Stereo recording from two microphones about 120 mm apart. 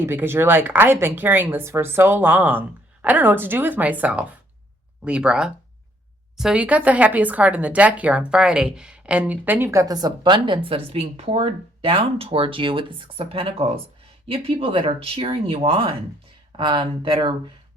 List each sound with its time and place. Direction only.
0.0 s speech: 20° right (ahead or behind)
9.9 s speech: 35° right (ahead or behind)